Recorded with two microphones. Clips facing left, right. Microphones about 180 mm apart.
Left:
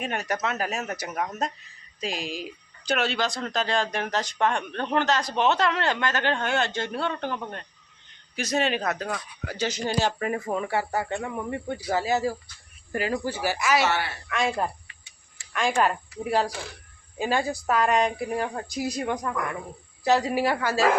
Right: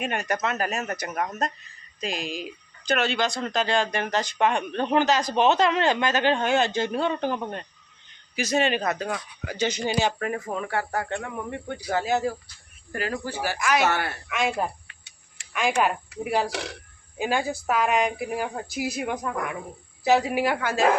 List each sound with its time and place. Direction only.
0.0 s a woman's voice: centre (ahead or behind)
2.1 s speech: 50° right (ahead or behind)
2.9 s a woman's voice: 5° left (ahead or behind)
8.4 s a woman's voice: centre (ahead or behind)
13.8 s speech: 50° right (ahead or behind)
14.3 s a woman's voice: 5° right (ahead or behind)
14.8 s tick-tock: 65° right (ahead or behind)
15.5 s a woman's voice: 5° right (ahead or behind)
16.5 s speech: 80° right
17.2 s a woman's voice: 5° right (ahead or behind)